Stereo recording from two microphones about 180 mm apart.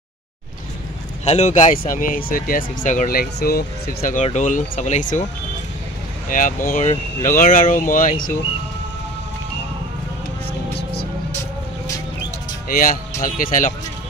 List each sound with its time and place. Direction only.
1.2 s speech: 40° left (ahead or behind)
6.2 s speech: 50° left (ahead or behind)
12.6 s speech: 50° left (ahead or behind)